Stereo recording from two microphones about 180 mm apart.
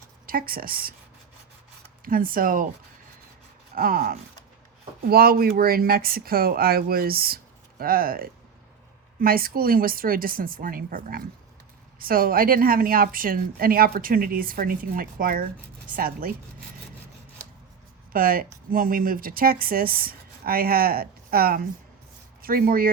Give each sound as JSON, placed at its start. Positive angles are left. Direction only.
{"t": 0.3, "sound": "a woman's voice", "side_deg": -55}
{"t": 2.0, "sound": "a woman's voice", "side_deg": -50}
{"t": 3.8, "sound": "a woman's voice", "side_deg": -55}
{"t": 18.1, "sound": "a woman's voice", "side_deg": -55}